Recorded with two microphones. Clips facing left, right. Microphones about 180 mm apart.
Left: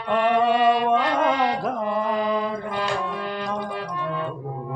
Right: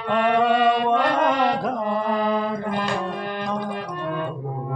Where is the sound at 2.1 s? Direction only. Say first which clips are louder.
Right 1 dB; 50° right (ahead or behind).